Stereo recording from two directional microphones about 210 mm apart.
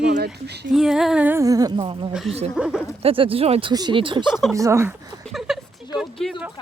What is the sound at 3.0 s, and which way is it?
Speech, 25° right (ahead or behind).